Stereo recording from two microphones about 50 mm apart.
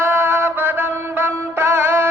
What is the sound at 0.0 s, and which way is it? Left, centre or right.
Mantra, right.